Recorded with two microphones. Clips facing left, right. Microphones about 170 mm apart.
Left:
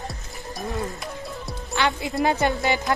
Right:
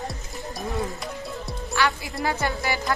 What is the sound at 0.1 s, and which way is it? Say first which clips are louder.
Music: right 1 dB; centre (ahead or behind).